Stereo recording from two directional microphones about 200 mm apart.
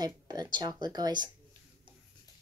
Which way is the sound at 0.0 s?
20° right (ahead or behind).